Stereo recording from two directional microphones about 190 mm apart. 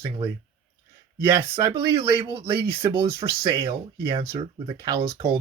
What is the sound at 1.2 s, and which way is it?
Speech, 15° right (ahead or behind).